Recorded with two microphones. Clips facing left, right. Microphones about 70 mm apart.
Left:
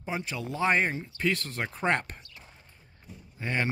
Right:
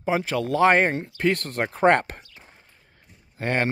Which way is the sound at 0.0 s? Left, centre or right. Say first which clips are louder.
Right 10 dB; right.